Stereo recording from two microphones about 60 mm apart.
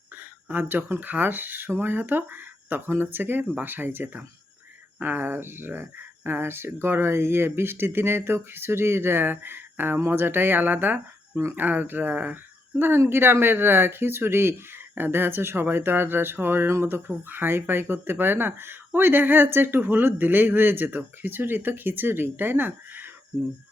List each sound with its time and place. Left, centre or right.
0.2 s speech: right